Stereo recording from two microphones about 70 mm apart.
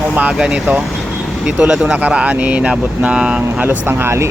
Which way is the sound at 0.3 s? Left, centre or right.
Centre.